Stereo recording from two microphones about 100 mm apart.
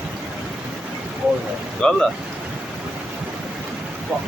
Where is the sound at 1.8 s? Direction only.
10° left (ahead or behind).